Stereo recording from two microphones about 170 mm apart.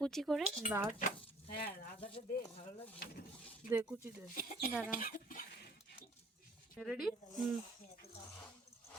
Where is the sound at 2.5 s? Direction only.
35° left (ahead or behind).